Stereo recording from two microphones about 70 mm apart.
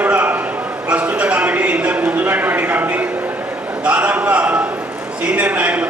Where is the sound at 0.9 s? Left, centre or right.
Centre.